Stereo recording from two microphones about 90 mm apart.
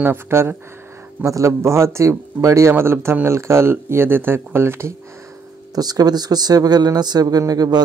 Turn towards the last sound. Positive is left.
turn(degrees=-45)  # may be behind; listen again after turning